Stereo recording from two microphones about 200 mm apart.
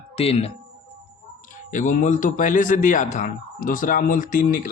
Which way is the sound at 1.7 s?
40° left (ahead or behind).